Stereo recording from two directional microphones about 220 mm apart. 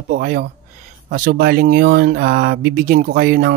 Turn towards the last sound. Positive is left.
turn(degrees=-40)  # may be behind; listen again after turning